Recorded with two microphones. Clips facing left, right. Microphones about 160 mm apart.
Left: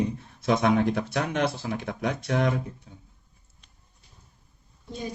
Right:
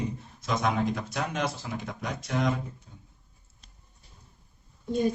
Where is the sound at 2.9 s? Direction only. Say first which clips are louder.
Left 4 dB; 75° left (ahead or behind).